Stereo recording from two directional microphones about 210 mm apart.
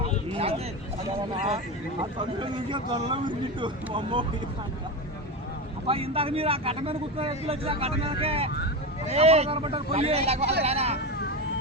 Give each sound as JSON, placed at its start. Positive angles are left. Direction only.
{"t": 1.5, "sound": "speech", "side_deg": -25}
{"t": 5.8, "sound": "speech", "side_deg": -25}